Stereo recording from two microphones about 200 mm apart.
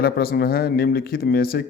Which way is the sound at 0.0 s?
50° left (ahead or behind).